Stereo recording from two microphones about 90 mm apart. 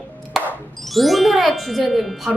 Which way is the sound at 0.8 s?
Centre (ahead or behind).